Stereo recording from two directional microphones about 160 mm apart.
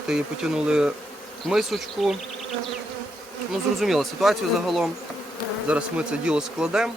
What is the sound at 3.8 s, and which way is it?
Speech, centre (ahead or behind).